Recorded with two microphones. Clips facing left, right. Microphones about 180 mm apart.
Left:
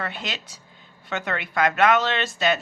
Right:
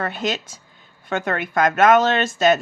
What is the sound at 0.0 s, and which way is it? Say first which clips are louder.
Speech: right 7 dB; 45° right (ahead or behind).